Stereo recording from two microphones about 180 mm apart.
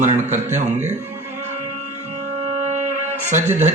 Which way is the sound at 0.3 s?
40° right (ahead or behind).